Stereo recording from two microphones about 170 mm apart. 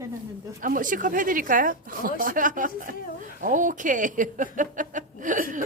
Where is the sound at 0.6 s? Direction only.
50° right (ahead or behind).